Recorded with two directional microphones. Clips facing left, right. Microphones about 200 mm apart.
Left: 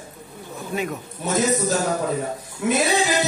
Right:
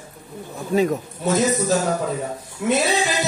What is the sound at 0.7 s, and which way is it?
Speech, 35° right (ahead or behind).